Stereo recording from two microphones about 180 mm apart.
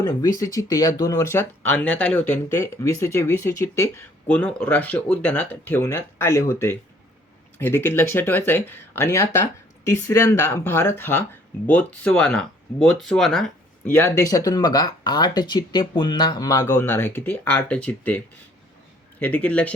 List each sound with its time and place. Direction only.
0.0 s speech: 20° left (ahead or behind)
19.2 s speech: 10° left (ahead or behind)